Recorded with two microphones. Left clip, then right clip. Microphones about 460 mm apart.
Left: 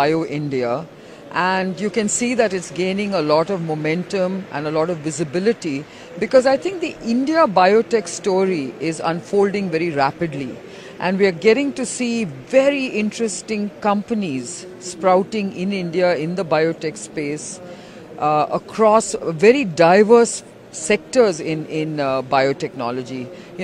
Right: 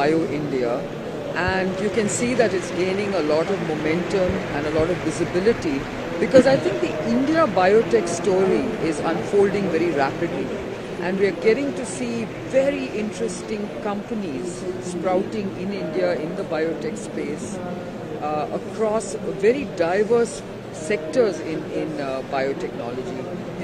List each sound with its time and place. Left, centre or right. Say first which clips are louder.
0.0 s speech: left 2 dB; left
5.3 s speech: left 1 dB; left
15.0 s speech: left 7 dB; left
18.2 s speech: left 8 dB; left